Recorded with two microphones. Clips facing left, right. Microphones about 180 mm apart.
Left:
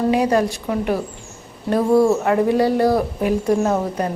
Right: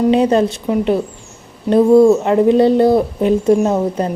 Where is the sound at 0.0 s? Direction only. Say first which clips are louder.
Right 5 dB; 25° right (ahead or behind).